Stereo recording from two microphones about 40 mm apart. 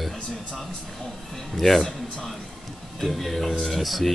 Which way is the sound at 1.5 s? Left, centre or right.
Centre.